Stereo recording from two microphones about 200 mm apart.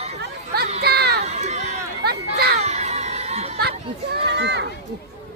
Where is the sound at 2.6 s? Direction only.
35° right (ahead or behind).